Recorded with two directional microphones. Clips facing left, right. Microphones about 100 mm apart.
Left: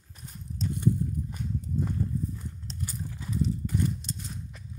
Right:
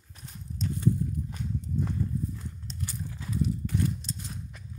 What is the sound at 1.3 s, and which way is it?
Horse, 5° left (ahead or behind).